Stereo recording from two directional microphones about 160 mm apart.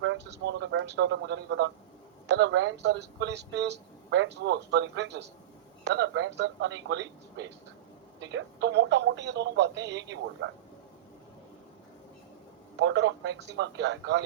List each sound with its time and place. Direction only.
0.3 s speech: 90° right
12.7 s speech: 90° right